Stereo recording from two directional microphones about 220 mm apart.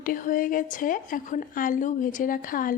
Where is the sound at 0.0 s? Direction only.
40° left (ahead or behind).